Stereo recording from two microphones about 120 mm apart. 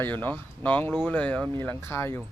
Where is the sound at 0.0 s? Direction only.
15° left (ahead or behind).